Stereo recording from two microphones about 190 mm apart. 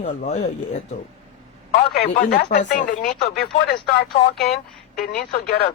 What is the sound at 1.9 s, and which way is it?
Speech, 50° left (ahead or behind).